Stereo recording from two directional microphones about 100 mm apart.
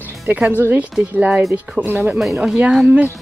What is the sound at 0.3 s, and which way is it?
Speech, 15° right (ahead or behind).